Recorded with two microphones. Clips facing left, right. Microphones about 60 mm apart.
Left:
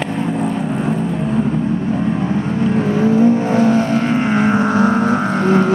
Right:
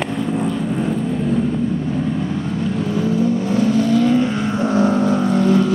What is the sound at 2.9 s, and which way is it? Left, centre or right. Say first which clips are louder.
Vehicle: left 6 dB; left.